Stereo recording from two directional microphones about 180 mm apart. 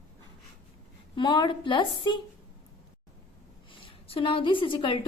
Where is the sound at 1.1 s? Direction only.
25° left (ahead or behind).